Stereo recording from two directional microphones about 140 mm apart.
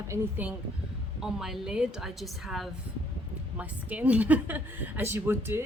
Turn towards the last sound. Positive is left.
turn(degrees=-15)  # may be behind; listen again after turning